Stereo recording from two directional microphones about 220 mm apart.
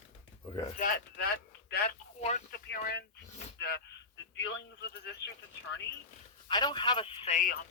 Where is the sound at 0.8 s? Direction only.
40° left (ahead or behind).